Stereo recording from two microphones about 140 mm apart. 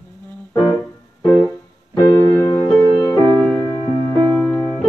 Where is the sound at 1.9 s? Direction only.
25° left (ahead or behind).